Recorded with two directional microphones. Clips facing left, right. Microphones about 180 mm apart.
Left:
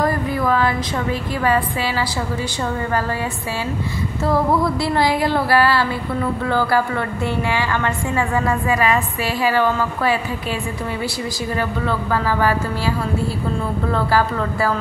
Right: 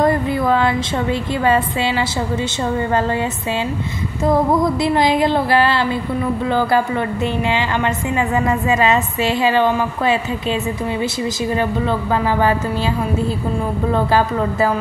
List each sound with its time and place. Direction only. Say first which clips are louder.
0.0 s a woman's voice: right 3 dB; 25° right (ahead or behind)
4.2 s a woman's voice: right 3 dB; 15° right (ahead or behind)
13.9 s a woman's voice: right 2 dB; 20° right (ahead or behind)